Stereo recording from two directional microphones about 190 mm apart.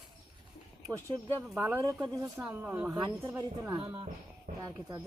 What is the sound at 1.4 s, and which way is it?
Speech, 10° right (ahead or behind).